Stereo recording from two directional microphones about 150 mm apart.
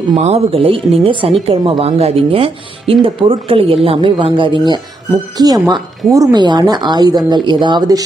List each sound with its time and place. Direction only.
0.1 s speech: 45° right (ahead or behind); by 8.0 s 30° right (ahead or behind)